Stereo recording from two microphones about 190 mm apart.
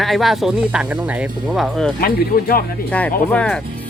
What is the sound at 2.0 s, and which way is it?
Speech, 50° left (ahead or behind).